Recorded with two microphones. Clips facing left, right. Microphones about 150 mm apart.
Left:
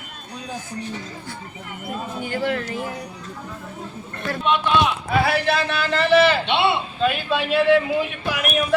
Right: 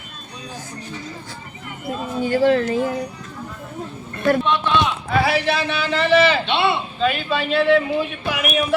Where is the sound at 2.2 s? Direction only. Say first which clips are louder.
Right 9 dB; 25° right (ahead or behind).